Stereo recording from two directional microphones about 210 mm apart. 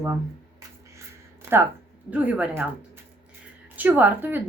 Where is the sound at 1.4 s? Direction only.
10° right (ahead or behind).